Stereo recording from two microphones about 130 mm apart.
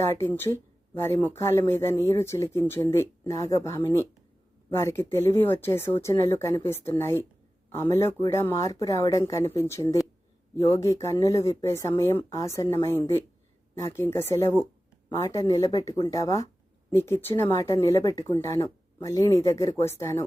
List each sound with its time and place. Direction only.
0.0 s speech: 20° left (ahead or behind)